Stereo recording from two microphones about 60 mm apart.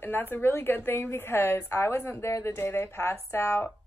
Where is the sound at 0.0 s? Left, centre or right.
Left.